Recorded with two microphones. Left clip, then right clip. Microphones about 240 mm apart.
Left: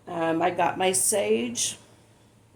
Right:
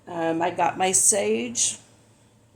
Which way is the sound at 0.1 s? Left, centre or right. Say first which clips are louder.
Even; right.